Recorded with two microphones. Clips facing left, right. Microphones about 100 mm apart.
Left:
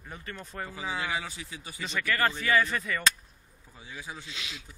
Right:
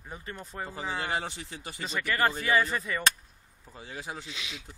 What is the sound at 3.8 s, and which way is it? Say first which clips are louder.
Speech: right 3 dB; 70° right (ahead or behind).